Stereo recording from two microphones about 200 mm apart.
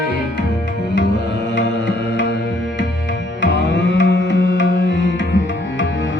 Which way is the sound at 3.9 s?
65° left (ahead or behind).